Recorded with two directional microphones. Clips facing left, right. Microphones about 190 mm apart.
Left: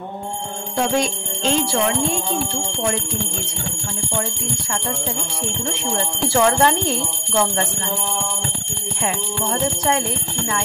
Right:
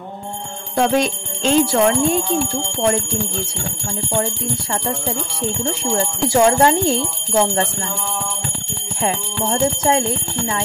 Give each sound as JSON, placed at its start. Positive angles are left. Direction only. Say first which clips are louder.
{"t": 6.2, "sound": "speech", "louder": "right 3 dB", "side_deg": -20}
{"t": 9.0, "sound": "speech", "louder": "right 3 dB", "side_deg": -25}